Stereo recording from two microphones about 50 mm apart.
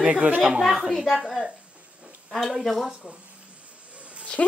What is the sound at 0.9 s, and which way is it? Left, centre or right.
Speech, centre.